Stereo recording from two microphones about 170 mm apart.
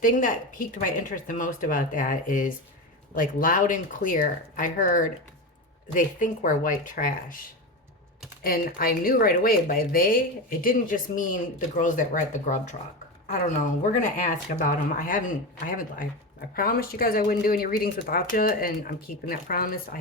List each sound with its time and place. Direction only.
0.0 s speech: 50° left (ahead or behind)
8.4 s speech: 60° left (ahead or behind)